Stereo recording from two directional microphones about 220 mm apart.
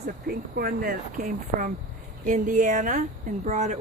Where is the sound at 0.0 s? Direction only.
40° right (ahead or behind).